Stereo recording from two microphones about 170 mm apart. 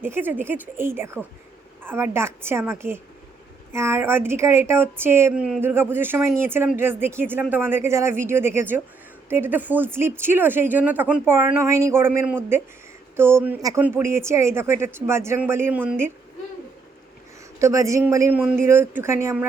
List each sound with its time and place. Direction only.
0.0 s a woman's voice: 10° right (ahead or behind)
17.6 s a woman's voice: 20° right (ahead or behind)